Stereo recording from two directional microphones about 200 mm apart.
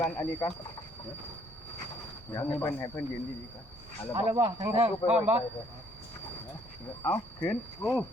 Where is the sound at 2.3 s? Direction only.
15° left (ahead or behind).